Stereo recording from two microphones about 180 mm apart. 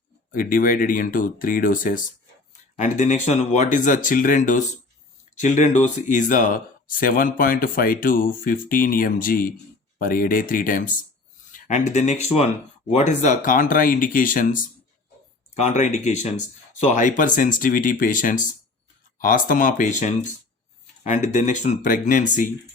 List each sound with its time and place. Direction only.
0.3 s speech: 50° left (ahead or behind)